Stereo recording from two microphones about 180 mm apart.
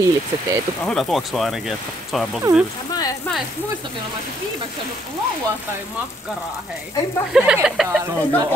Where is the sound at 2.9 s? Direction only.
20° left (ahead or behind).